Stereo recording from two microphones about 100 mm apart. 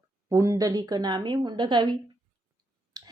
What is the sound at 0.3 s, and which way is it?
A woman's voice, 30° right (ahead or behind).